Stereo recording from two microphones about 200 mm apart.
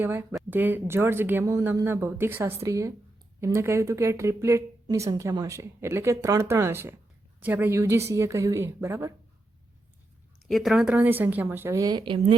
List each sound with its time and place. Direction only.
0.0 s speech: 10° right (ahead or behind)
10.5 s speech: centre (ahead or behind); by 12.2 s 25° right (ahead or behind)